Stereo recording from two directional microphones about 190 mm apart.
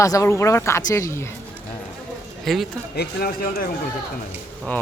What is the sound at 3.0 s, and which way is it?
Speech, 50° left (ahead or behind).